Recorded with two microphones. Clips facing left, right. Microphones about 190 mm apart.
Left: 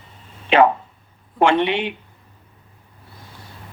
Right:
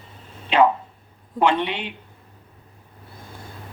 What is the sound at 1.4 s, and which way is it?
Speech, 85° left.